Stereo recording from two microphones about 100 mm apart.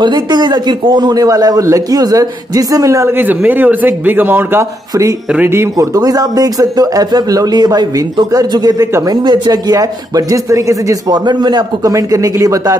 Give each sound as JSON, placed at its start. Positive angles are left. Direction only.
{"t": 0.0, "sound": "a man's voice", "side_deg": -50}
{"t": 5.8, "sound": "a man's voice", "side_deg": -35}